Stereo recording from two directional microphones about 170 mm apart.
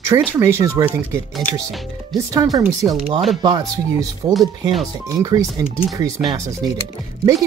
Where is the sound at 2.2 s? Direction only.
20° right (ahead or behind).